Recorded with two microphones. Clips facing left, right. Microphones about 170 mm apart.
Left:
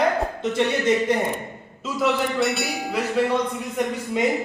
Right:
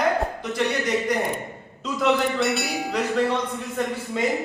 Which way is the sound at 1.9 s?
Centre (ahead or behind).